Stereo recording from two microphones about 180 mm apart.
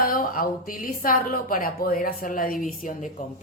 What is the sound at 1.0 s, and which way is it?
A woman's voice, 50° left (ahead or behind).